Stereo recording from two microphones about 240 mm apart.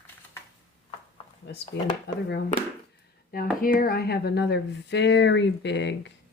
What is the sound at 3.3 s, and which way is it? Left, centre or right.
Speech, left.